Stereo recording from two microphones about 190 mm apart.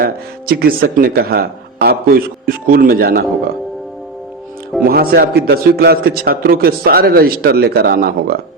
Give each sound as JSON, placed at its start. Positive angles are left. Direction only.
{"t": 0.0, "sound": "speech", "side_deg": -50}
{"t": 4.9, "sound": "a man's voice", "side_deg": -55}